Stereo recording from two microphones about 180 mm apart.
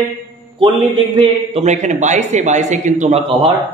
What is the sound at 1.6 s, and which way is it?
A man's voice, 40° right (ahead or behind).